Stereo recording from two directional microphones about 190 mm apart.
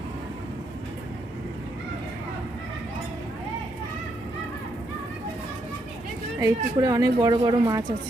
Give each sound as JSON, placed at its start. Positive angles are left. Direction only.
{"t": 6.4, "sound": "speech", "side_deg": -15}